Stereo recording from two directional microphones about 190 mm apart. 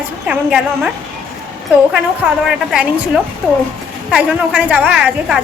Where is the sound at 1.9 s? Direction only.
Centre (ahead or behind).